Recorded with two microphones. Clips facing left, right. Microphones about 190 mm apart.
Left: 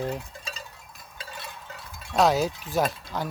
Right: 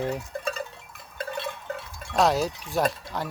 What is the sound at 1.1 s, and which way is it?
Cowbell, 60° right (ahead or behind).